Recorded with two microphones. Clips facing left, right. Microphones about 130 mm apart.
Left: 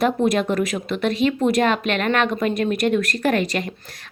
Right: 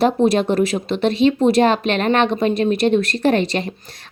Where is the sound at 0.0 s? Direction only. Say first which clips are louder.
Right 3 dB; 30° right (ahead or behind).